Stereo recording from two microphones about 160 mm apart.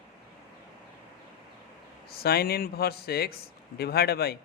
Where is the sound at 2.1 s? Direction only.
75° left (ahead or behind).